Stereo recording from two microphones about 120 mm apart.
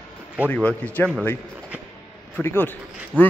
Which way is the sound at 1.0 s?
15° left (ahead or behind).